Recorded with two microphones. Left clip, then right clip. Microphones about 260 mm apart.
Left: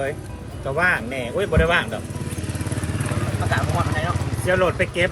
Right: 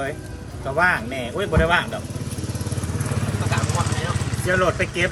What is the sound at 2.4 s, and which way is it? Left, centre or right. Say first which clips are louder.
Vehicle: left 2 dB; left.